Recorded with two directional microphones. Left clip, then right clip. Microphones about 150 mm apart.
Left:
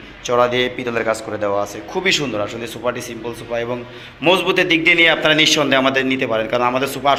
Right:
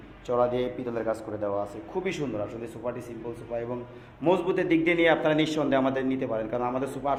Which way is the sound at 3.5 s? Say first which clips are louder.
Left 10 dB; 25° left (ahead or behind).